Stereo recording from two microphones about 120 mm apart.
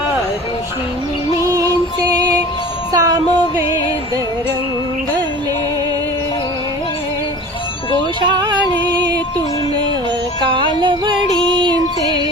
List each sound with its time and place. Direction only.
1.3 s music: 30° right (ahead or behind)
2.9 s a sound: 30° right (ahead or behind)
8.2 s yodeling: 40° right (ahead or behind)
10.4 s music: 40° right (ahead or behind)